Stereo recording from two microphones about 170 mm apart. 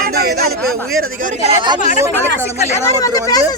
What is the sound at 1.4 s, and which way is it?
Speech, 30° right (ahead or behind).